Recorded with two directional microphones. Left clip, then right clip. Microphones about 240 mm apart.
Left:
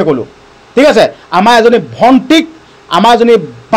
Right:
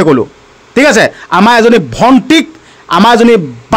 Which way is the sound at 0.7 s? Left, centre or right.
Right.